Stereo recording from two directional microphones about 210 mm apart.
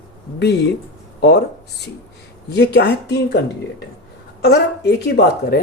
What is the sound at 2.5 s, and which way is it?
Speech, 55° left (ahead or behind).